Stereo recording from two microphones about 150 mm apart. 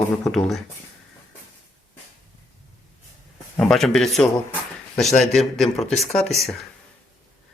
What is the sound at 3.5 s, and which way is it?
Speech, 5° left (ahead or behind).